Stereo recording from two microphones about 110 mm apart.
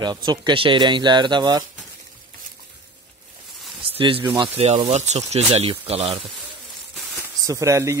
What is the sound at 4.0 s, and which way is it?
Speech, 55° right (ahead or behind).